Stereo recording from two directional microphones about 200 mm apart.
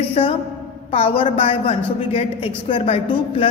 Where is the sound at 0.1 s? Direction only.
30° left (ahead or behind).